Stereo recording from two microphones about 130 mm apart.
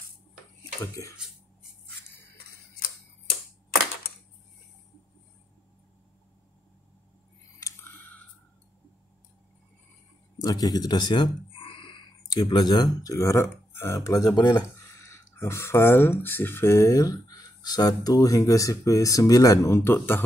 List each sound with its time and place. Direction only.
1.1 s cutlery: 5° right (ahead or behind)
7.6 s a sound: 20° left (ahead or behind)
10.4 s speech: 30° left (ahead or behind)